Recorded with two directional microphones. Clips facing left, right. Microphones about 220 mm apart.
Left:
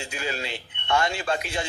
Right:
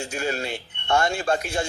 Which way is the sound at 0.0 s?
45° right (ahead or behind).